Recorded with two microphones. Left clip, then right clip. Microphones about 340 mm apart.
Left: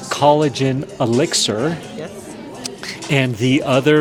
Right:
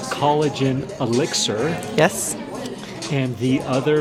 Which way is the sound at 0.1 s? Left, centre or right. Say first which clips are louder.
Left 5 dB; left.